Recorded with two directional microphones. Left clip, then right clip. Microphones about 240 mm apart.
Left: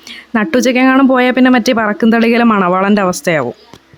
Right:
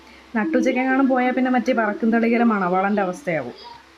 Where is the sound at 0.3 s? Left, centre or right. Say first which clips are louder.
Left 8 dB; left.